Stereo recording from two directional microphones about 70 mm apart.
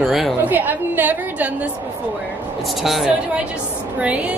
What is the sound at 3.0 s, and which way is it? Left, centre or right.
A woman's voice, centre.